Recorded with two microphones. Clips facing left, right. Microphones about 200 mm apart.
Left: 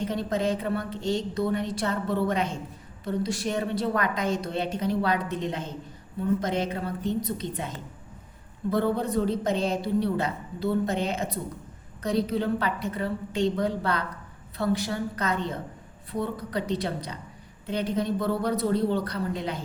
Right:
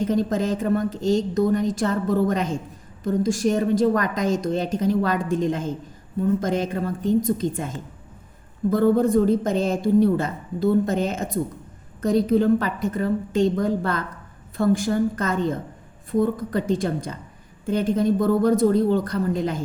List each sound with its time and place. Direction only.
0.0 s a woman's voice: 45° right (ahead or behind)
8.7 s a woman's voice: 45° right (ahead or behind)